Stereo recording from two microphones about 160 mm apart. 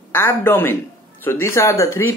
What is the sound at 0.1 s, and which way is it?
Speech, 15° left (ahead or behind).